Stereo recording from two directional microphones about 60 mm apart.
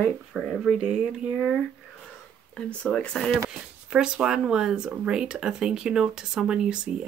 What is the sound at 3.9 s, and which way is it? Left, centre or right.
Speech, centre.